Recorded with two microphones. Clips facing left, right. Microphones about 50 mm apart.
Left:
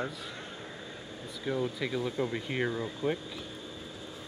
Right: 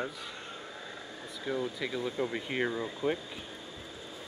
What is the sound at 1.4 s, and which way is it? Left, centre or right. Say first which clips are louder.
Speech: left 2 dB; centre.